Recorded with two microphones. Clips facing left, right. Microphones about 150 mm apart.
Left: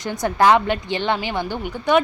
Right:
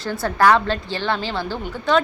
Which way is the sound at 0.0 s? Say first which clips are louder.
Even; 15° left (ahead or behind).